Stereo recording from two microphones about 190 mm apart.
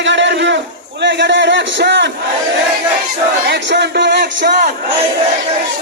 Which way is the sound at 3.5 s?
65° right (ahead or behind).